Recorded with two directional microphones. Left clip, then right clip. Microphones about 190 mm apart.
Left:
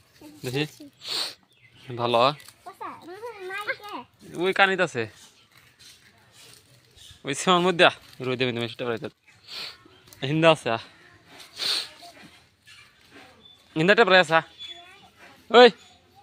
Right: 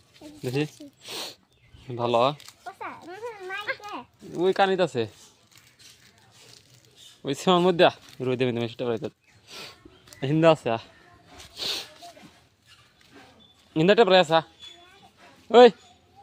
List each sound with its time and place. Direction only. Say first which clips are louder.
0.4 s speech: even; 15° right (ahead or behind)
1.9 s speech: left 1 dB; 10° right (ahead or behind)
2.7 s a sound: left 1 dB; 5° right (ahead or behind)
4.4 s speech: left 1 dB; 25° right (ahead or behind)
7.3 s speech: even; 25° right (ahead or behind)
10.2 s speech: even; 20° right (ahead or behind)
11.5 s a sound: left 4 dB; 25° right (ahead or behind)
13.7 s speech: even; 20° right (ahead or behind)
15.4 s a man's voice: even; 15° right (ahead or behind)